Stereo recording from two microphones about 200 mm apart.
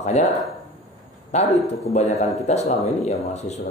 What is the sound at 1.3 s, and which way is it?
Speech, 35° left (ahead or behind).